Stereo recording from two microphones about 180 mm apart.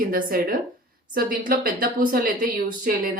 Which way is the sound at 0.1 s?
50° right (ahead or behind).